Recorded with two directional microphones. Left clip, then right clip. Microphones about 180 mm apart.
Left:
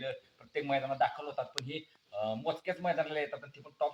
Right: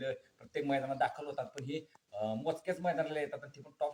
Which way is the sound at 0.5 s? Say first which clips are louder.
Left 2 dB; 15° right (ahead or behind).